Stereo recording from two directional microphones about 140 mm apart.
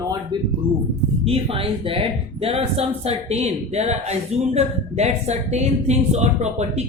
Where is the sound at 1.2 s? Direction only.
45° right (ahead or behind).